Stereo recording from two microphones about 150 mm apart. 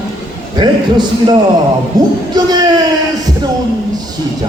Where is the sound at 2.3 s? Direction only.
30° right (ahead or behind).